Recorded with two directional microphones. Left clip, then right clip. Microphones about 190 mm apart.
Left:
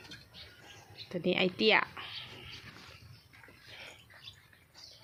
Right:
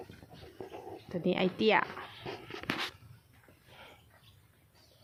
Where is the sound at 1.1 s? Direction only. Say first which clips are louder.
Left 1 dB; centre (ahead or behind).